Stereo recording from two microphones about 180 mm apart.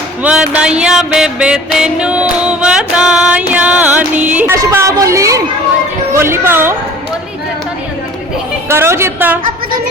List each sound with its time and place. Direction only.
0.2 s music: 10° right (ahead or behind)
8.7 s music: 15° right (ahead or behind)